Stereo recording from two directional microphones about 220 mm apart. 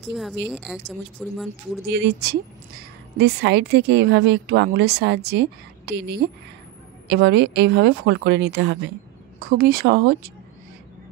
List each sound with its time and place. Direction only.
0.0 s speech: centre (ahead or behind)
1.9 s a woman's voice: 50° right (ahead or behind)